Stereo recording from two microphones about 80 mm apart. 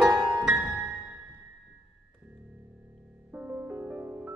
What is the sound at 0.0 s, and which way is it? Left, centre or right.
Music, centre.